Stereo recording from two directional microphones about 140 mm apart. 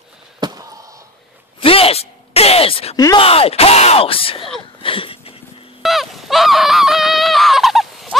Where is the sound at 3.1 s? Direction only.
45° left (ahead or behind).